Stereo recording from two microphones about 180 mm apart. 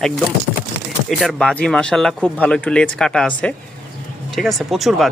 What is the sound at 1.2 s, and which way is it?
Speech, 5° left (ahead or behind).